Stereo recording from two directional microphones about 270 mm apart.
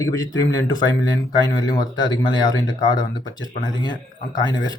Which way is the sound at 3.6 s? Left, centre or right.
Centre.